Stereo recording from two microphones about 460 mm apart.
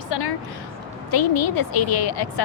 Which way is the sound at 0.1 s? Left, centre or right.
Left.